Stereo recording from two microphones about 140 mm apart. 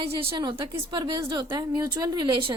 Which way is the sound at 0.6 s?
30° right (ahead or behind).